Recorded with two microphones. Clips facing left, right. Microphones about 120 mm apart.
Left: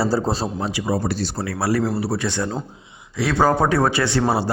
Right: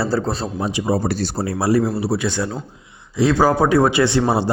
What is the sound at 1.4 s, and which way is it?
Speech, 25° right (ahead or behind).